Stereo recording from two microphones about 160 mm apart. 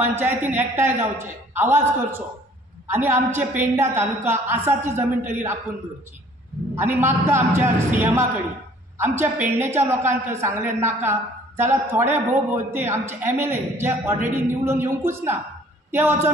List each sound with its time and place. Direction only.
0.1 s a woman's voice: 15° right (ahead or behind)
6.7 s a woman's voice: 15° right (ahead or behind)